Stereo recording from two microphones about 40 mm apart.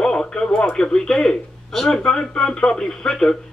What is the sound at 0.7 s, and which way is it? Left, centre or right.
Speech, centre.